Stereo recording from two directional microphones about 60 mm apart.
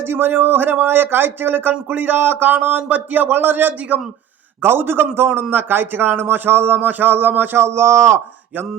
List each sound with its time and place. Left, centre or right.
0.0 s a man's voice: right
4.6 s a man's voice: right
7.6 s speech: right